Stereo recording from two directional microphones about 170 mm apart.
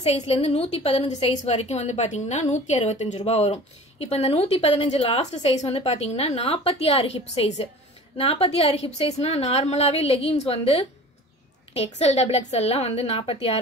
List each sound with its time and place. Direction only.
0.0 s speech: 40° left (ahead or behind)